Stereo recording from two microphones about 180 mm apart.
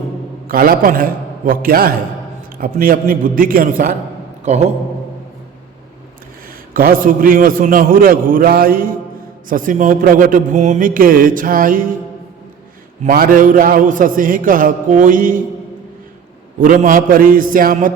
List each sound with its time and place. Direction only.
0.4 s a man's voice: 55° right (ahead or behind)
4.4 s a man's voice: 40° right (ahead or behind)
6.7 s a man's voice: 50° right (ahead or behind)
13.1 s a man's voice: 50° right (ahead or behind)
16.6 s a man's voice: 50° right (ahead or behind)